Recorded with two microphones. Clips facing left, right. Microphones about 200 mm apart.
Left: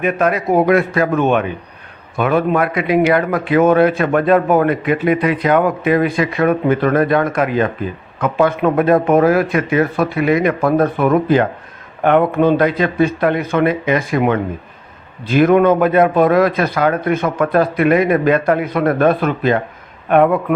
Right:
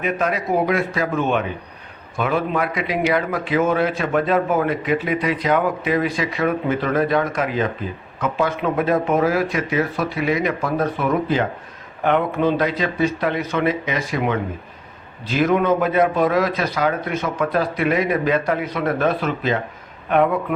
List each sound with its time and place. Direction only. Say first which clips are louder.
0.0 s a man's voice: left 6 dB; 60° left (ahead or behind)